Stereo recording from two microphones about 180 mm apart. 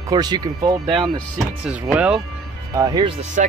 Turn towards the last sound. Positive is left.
turn(degrees=-45)  # may be behind; listen again after turning